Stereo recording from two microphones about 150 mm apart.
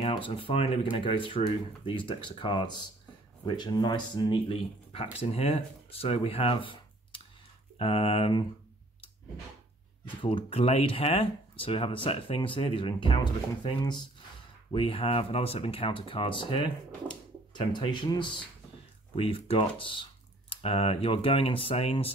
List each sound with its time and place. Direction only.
0.1 s speech: 35° left (ahead or behind)
10.2 s speech: 35° left (ahead or behind)